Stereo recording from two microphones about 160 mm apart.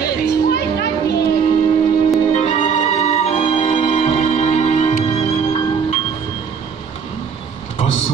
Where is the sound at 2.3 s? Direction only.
45° left (ahead or behind).